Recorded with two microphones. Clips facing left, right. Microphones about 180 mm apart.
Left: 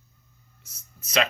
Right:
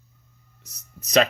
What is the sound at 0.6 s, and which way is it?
Speech, 40° right (ahead or behind).